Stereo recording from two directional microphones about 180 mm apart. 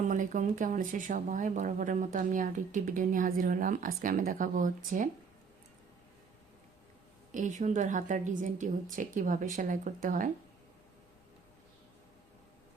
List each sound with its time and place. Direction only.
0.1 s speech: 45° right (ahead or behind)
7.3 s speech: 45° right (ahead or behind)